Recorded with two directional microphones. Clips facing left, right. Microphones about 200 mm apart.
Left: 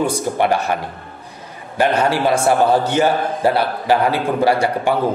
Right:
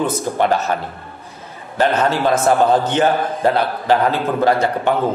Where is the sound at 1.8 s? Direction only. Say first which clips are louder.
Even; 10° left (ahead or behind).